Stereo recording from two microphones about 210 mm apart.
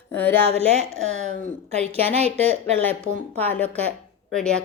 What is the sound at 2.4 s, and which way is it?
Speech, 30° right (ahead or behind).